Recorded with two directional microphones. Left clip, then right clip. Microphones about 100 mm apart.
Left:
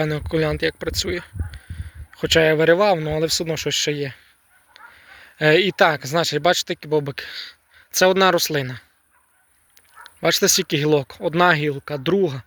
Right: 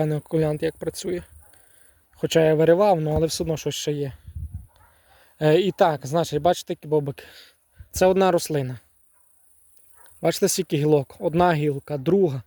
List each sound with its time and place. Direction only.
0.0 s speech: 40° right (ahead or behind)
10.0 s speech: 40° right (ahead or behind)